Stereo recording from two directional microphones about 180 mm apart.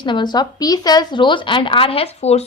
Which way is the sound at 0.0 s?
25° left (ahead or behind).